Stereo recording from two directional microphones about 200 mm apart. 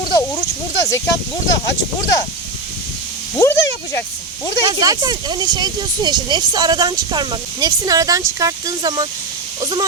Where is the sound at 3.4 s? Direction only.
15° left (ahead or behind).